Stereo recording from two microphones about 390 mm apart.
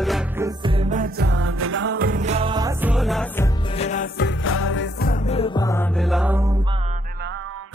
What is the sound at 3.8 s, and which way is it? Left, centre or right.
Music, centre.